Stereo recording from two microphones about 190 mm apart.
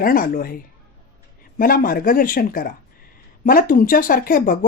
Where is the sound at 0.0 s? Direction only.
50° left (ahead or behind).